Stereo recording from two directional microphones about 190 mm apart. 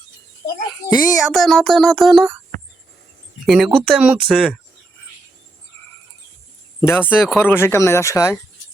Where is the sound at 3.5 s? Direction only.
Centre (ahead or behind).